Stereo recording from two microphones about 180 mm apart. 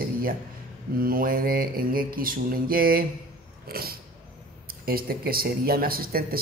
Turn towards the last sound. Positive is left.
turn(degrees=-55)  # may be behind; listen again after turning